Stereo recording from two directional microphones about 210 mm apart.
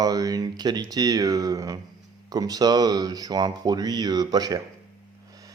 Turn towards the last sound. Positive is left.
turn(degrees=-20)  # may be behind; listen again after turning